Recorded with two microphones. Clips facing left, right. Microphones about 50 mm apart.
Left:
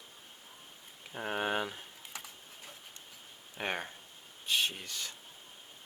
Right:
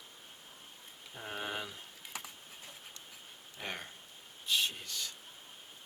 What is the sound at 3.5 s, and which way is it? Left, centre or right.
Speech, left.